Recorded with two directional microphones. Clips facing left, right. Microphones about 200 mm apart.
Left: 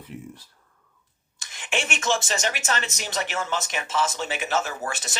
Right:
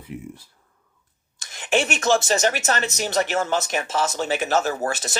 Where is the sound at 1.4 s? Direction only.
40° right (ahead or behind).